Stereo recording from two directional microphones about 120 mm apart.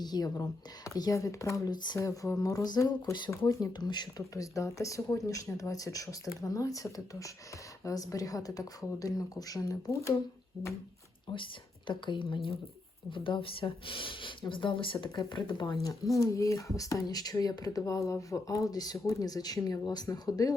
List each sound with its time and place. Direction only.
0.0 s speech: 35° left (ahead or behind)
2.0 s speech: 25° left (ahead or behind)
11.9 s speech: 45° left (ahead or behind)
15.7 s speech: 25° left (ahead or behind)